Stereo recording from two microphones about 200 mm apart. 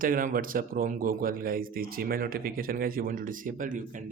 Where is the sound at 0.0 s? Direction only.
45° right (ahead or behind).